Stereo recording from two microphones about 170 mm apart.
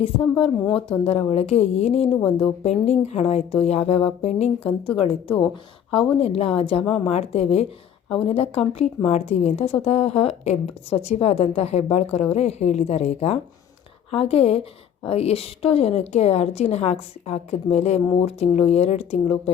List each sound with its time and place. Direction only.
0.0 s a woman's voice: 30° left (ahead or behind)
6.1 s a woman's voice: 35° left (ahead or behind)